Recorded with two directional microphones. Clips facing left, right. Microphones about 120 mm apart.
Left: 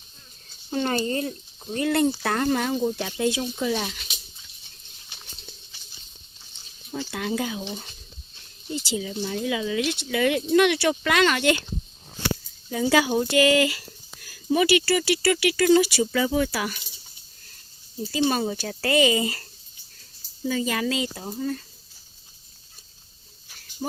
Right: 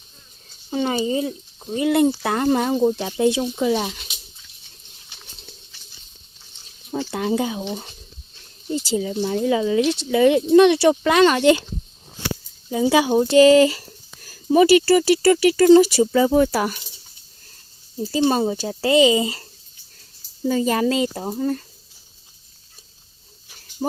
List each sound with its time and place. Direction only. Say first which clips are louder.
0.7 s speech: right 3 dB; 5° right (ahead or behind)
2.5 s speech: right 6 dB; 25° right (ahead or behind)
7.1 s speech: right 5 dB; 25° right (ahead or behind)
8.7 s speech: right 6 dB; 40° right (ahead or behind)
12.7 s speech: right 4 dB; 20° right (ahead or behind); by 16.8 s 40° right (ahead or behind)
18.0 s speech: right 5 dB; 30° right (ahead or behind)
20.5 s speech: right 6 dB; 35° right (ahead or behind)